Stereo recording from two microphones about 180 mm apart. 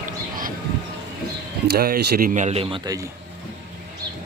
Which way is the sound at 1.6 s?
60° right (ahead or behind).